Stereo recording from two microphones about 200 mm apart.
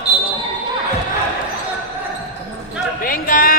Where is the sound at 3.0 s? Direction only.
45° left (ahead or behind).